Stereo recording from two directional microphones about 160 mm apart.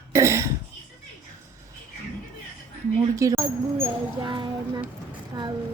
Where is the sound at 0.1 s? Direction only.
15° right (ahead or behind).